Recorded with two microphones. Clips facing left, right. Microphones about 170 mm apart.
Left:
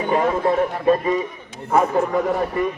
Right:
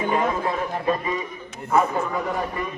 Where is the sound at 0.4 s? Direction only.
45° left (ahead or behind).